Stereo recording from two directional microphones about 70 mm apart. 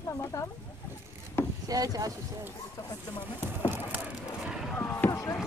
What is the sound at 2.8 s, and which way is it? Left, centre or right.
Speech, left.